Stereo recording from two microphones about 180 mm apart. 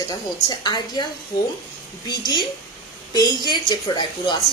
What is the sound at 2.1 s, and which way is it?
Speech, 25° left (ahead or behind).